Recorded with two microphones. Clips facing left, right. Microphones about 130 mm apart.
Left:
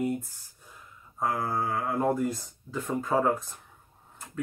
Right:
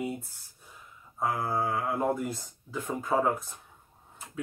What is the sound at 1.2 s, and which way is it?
Speech, centre (ahead or behind).